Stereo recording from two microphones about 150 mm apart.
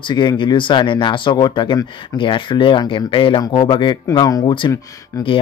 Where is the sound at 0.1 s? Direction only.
30° left (ahead or behind).